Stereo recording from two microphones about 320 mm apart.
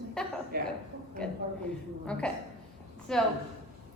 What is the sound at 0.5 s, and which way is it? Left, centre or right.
Speech, right.